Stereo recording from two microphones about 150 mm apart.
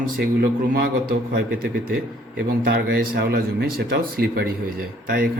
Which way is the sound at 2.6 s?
85° right.